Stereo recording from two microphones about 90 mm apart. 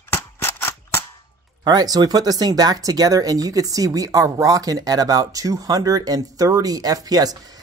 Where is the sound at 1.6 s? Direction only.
45° right (ahead or behind).